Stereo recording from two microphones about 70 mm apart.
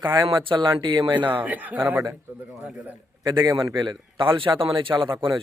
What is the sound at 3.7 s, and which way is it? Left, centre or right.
Speech, right.